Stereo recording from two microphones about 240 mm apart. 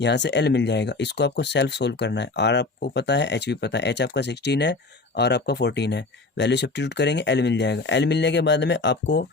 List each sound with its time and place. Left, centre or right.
0.0 s speech: left